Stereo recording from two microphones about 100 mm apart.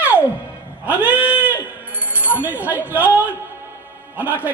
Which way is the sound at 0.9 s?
15° right (ahead or behind).